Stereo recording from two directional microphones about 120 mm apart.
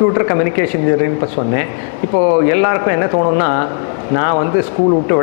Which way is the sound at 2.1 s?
20° left (ahead or behind).